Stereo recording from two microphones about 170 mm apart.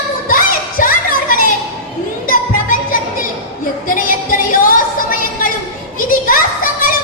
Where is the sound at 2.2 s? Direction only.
55° left (ahead or behind).